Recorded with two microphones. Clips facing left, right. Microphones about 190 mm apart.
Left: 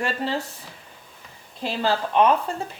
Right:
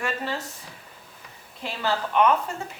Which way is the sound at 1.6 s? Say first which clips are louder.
Left 4 dB; 30° left (ahead or behind).